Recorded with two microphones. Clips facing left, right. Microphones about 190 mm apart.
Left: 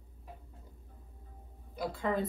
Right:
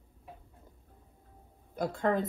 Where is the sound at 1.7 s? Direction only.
50° right (ahead or behind).